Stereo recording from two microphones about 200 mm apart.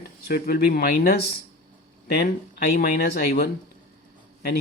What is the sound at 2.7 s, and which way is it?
Speech, 45° left (ahead or behind).